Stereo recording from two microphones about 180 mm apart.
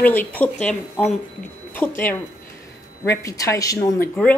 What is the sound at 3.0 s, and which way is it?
A woman's voice, 15° left (ahead or behind).